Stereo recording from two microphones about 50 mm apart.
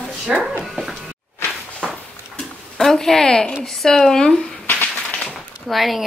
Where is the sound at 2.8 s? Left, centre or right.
Centre.